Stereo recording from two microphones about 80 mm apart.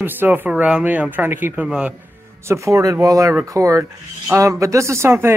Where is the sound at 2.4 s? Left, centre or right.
Right.